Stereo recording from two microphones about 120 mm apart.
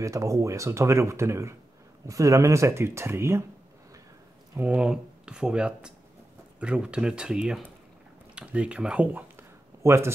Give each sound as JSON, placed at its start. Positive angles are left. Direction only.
{"t": 0.0, "sound": "speech", "side_deg": -25}
{"t": 4.6, "sound": "speech", "side_deg": -10}